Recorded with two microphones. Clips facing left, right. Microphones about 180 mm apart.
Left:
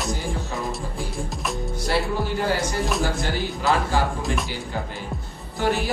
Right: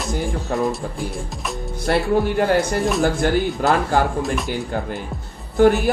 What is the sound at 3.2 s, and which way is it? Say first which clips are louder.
Mantra: right 9 dB; 55° right (ahead or behind).